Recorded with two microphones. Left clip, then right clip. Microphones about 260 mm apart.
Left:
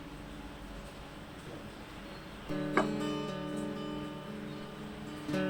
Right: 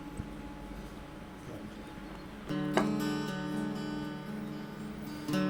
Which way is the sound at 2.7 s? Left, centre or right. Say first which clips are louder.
Even; right.